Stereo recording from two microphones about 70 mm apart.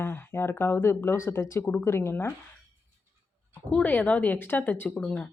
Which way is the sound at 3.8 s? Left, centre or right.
Left.